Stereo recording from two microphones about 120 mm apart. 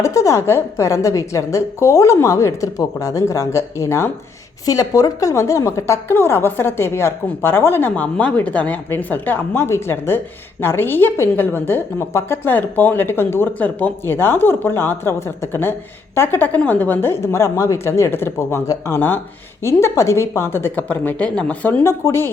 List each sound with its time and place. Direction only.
0.0 s a woman's voice: 25° left (ahead or behind)
21.8 s a woman's voice: 25° left (ahead or behind)